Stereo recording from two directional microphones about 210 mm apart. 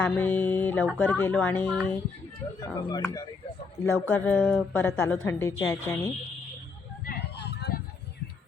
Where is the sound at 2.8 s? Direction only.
20° left (ahead or behind).